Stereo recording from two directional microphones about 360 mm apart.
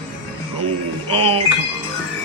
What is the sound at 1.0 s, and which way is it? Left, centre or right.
Speech, centre.